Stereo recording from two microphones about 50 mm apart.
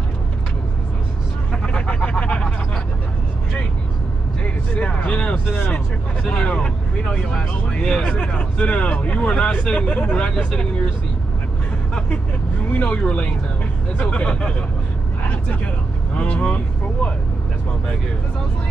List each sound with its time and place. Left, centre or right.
1.5 s a sound: left
4.4 s vehicle: left
8.0 s speech: left
10.1 s speech: left
12.6 s speech: left
15.2 s vehicle: left
16.2 s speech: left